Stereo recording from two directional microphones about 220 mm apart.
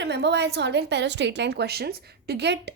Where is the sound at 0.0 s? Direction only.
50° right (ahead or behind).